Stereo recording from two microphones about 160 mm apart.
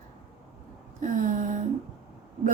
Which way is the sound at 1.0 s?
55° right (ahead or behind).